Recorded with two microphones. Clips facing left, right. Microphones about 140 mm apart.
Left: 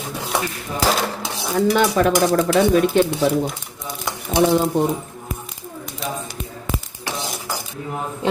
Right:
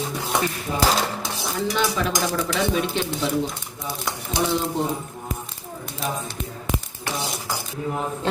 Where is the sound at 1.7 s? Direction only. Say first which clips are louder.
Left 7 dB; 50° left (ahead or behind).